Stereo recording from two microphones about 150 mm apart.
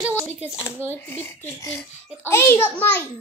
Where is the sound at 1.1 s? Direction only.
15° left (ahead or behind).